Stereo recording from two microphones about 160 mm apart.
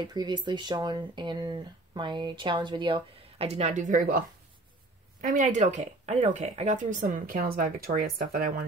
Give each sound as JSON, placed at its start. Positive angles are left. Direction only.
{"t": 0.0, "sound": "speech", "side_deg": -25}
{"t": 5.2, "sound": "speech", "side_deg": -50}